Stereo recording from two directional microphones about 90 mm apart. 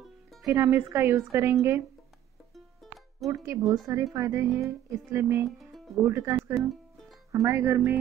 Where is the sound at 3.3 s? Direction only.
35° right (ahead or behind).